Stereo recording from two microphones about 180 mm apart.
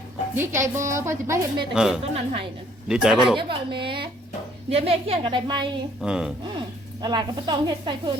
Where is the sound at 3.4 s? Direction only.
30° right (ahead or behind).